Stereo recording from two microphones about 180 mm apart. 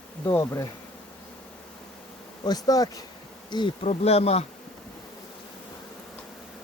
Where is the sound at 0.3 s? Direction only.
15° left (ahead or behind).